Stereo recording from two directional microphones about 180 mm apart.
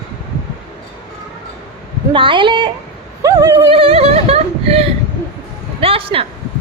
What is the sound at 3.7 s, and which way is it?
Singing, 30° right (ahead or behind).